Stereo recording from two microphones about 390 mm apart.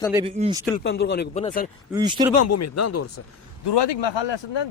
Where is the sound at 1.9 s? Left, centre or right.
Centre.